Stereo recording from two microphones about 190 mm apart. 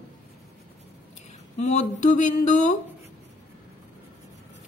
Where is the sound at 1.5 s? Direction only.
40° left (ahead or behind).